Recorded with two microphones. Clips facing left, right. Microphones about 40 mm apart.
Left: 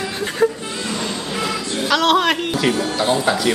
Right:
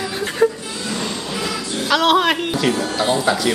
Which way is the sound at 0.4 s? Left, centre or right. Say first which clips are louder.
Right 1 dB; centre.